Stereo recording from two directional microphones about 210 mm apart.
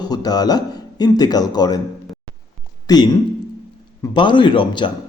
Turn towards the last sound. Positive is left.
turn(degrees=20)  # may be behind; listen again after turning